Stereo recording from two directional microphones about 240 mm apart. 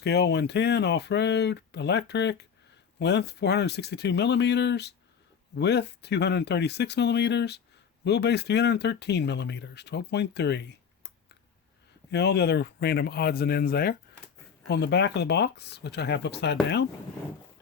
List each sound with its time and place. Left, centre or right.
0.0 s speech: left
12.1 s speech: left